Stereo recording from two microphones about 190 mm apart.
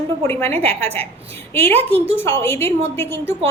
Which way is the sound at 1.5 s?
10° left (ahead or behind).